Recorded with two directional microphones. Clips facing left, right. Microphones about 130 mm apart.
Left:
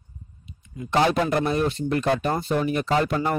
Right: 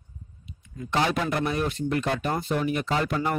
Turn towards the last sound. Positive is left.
turn(degrees=35)  # may be behind; listen again after turning